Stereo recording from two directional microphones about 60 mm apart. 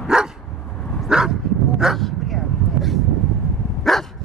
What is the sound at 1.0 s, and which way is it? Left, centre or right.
Bow-wow, centre.